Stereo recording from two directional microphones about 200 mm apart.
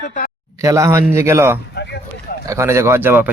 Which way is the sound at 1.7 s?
55° left (ahead or behind).